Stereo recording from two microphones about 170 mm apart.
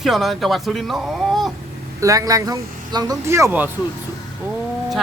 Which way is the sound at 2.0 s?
20° right (ahead or behind).